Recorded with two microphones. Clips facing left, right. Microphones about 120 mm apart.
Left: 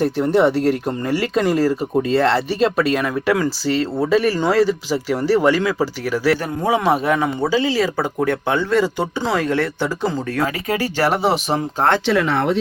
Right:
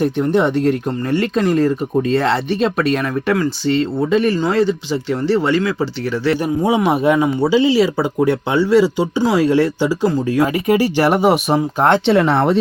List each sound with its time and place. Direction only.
0.3 s speech: 5° left (ahead or behind)
6.4 s speech: 15° right (ahead or behind)
12.0 s speech: 30° right (ahead or behind)